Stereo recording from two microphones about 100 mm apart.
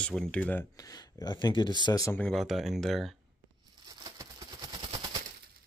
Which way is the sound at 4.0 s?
40° right (ahead or behind).